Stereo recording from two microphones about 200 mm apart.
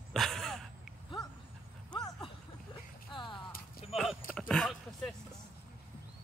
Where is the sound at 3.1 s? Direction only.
25° left (ahead or behind).